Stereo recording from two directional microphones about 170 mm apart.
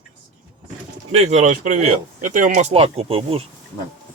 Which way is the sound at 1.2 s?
40° right (ahead or behind).